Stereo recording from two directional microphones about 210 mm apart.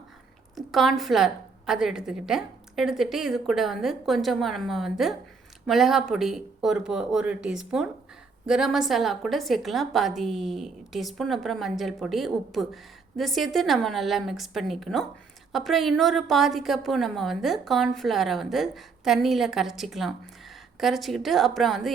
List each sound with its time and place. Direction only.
0.5 s a woman's voice: centre (ahead or behind)